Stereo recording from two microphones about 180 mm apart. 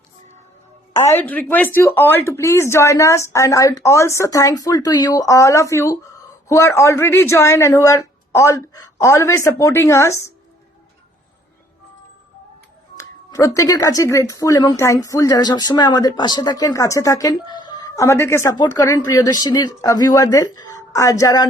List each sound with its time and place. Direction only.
0.9 s speech: 15° left (ahead or behind)
13.0 s speech: 15° left (ahead or behind)